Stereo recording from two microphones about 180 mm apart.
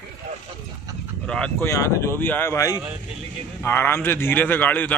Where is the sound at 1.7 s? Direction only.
15° left (ahead or behind).